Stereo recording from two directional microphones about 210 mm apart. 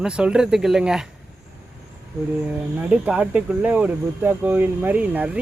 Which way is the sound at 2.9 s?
5° right (ahead or behind).